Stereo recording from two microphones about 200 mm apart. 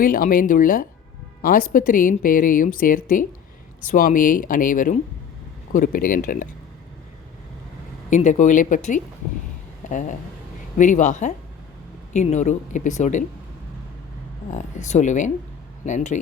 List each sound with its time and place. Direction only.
0.0 s a woman's voice: 45° left (ahead or behind)
8.1 s speech: 40° left (ahead or behind)
14.5 s speech: 35° left (ahead or behind)